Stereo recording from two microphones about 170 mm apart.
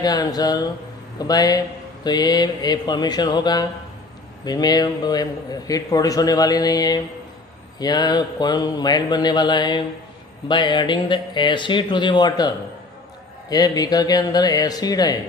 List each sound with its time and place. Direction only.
0.0 s a man's voice: 20° left (ahead or behind)